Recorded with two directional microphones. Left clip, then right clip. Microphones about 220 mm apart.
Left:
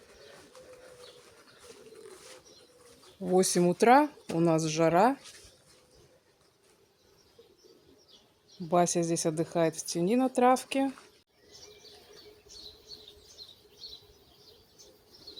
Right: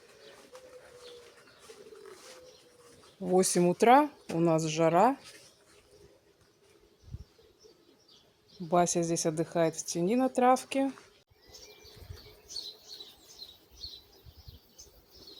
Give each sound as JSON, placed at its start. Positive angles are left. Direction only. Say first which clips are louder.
{"t": 0.5, "sound": "bird", "louder": "right 3 dB", "side_deg": -10}
{"t": 1.7, "sound": "bird", "louder": "right 2 dB", "side_deg": -10}
{"t": 3.2, "sound": "speech", "louder": "even", "side_deg": 0}
{"t": 8.7, "sound": "speech", "louder": "left 1 dB", "side_deg": 5}